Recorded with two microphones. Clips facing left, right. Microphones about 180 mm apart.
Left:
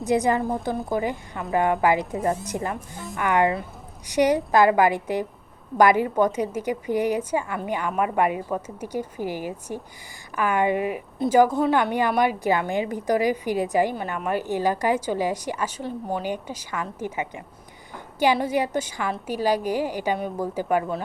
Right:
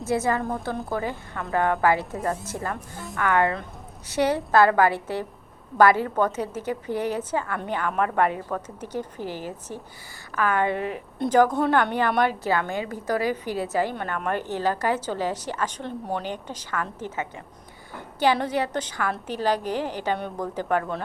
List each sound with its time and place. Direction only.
0.0 s a woman's voice: 15° left (ahead or behind)